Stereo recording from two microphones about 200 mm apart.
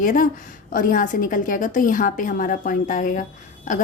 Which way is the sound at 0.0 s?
40° left (ahead or behind).